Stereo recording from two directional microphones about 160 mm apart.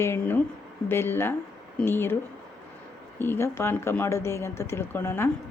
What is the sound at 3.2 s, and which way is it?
A woman's voice, 15° left (ahead or behind).